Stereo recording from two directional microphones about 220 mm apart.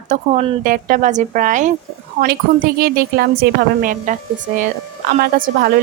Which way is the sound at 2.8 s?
45° right (ahead or behind).